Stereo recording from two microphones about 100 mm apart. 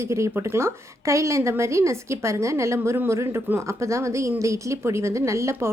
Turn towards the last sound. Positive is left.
turn(degrees=-30)  # may be behind; listen again after turning